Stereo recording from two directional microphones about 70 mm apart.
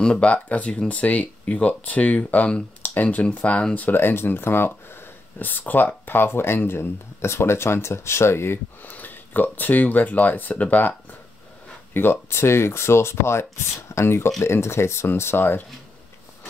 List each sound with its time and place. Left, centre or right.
0.2 s speech: centre